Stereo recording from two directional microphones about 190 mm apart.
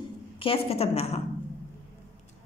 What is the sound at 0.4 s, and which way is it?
Speech, 30° left (ahead or behind).